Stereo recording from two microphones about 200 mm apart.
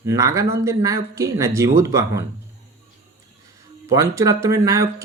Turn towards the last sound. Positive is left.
turn(degrees=-15)  # may be behind; listen again after turning